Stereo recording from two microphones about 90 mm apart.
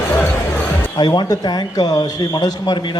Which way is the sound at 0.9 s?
50° left (ahead or behind).